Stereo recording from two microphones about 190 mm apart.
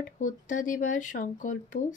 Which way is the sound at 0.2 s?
45° left (ahead or behind).